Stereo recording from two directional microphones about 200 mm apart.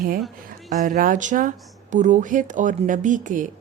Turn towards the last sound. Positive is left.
turn(degrees=-40)  # may be behind; listen again after turning